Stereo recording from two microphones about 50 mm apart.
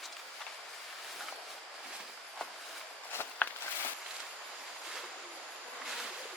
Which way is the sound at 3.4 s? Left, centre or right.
Left.